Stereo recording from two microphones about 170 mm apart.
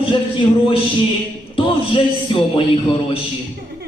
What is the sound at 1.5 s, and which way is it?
A man's voice, 30° left (ahead or behind).